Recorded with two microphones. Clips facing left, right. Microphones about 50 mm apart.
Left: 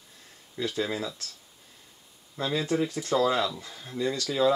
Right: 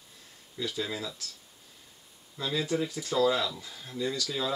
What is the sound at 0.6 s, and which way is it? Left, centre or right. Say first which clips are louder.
Speech: left 4 dB; left.